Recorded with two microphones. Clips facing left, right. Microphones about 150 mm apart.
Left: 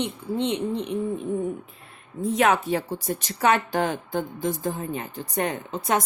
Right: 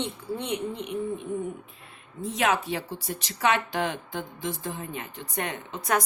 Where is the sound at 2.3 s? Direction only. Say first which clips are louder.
Left 5 dB; 45° left (ahead or behind); by 6.0 s 25° left (ahead or behind).